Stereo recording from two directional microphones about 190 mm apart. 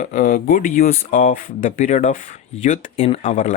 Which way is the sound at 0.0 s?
45° left (ahead or behind).